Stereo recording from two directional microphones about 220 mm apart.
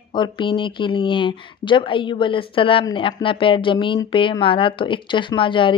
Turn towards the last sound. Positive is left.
turn(degrees=20)  # may be behind; listen again after turning